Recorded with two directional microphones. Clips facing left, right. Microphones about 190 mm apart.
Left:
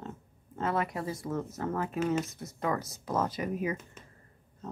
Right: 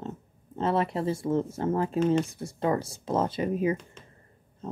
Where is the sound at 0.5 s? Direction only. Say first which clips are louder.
Right 5 dB; 25° right (ahead or behind).